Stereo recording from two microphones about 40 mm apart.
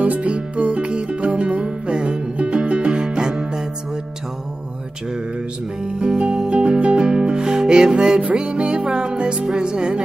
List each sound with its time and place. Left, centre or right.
0.0 s music: right; by 3.6 s centre
5.9 s music: right